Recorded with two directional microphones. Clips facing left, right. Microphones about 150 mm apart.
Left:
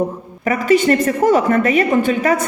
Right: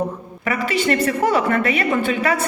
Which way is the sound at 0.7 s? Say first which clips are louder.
Left 7 dB; 45° left (ahead or behind).